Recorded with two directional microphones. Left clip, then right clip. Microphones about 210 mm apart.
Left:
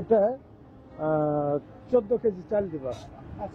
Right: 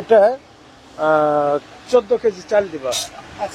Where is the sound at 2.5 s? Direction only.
10° right (ahead or behind).